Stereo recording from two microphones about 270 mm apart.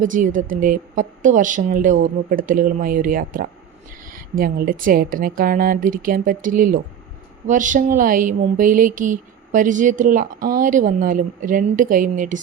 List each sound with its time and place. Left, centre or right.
0.0 s a woman's voice: right